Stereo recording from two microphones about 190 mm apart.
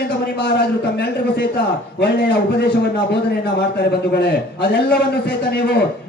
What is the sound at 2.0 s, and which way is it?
A man's voice, 60° left (ahead or behind).